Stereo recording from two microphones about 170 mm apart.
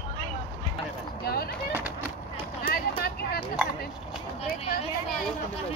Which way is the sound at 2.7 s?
60° left (ahead or behind).